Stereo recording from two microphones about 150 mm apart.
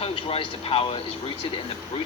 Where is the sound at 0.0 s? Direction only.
40° left (ahead or behind).